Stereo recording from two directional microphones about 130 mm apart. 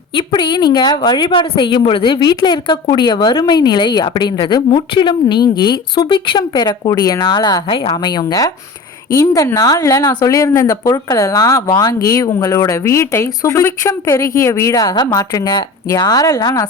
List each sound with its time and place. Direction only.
0.3 s a woman's voice: 35° left (ahead or behind)